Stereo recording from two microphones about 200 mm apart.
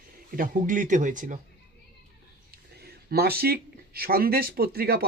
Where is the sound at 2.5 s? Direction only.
50° right (ahead or behind).